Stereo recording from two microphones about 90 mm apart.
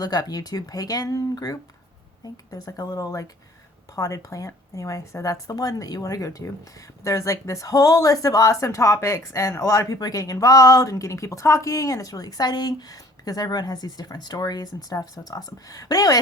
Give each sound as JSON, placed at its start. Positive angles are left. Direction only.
{"t": 0.0, "sound": "speech", "side_deg": 45}